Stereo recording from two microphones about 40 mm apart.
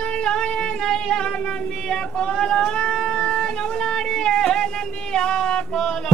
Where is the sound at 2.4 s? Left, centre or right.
Centre.